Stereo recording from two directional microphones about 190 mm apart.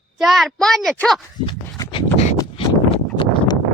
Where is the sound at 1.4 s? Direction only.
25° left (ahead or behind).